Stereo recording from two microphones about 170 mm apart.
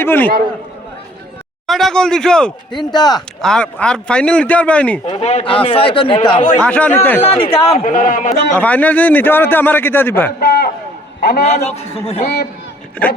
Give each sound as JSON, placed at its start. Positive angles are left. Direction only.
{"t": 0.0, "sound": "a man's voice", "side_deg": 10}
{"t": 1.6, "sound": "speech", "side_deg": 0}
{"t": 2.7, "sound": "speech", "side_deg": 25}
{"t": 3.4, "sound": "a man's voice", "side_deg": 5}
{"t": 5.0, "sound": "a man's voice", "side_deg": 40}
{"t": 6.6, "sound": "a man's voice", "side_deg": 5}
{"t": 7.2, "sound": "a man's voice", "side_deg": 35}
{"t": 7.9, "sound": "a man's voice", "side_deg": 50}
{"t": 8.5, "sound": "a man's voice", "side_deg": 10}
{"t": 10.4, "sound": "a sound", "side_deg": 65}
{"t": 11.2, "sound": "a man's voice", "side_deg": 65}
{"t": 11.4, "sound": "a man's voice", "side_deg": 40}
{"t": 12.2, "sound": "a man's voice", "side_deg": 70}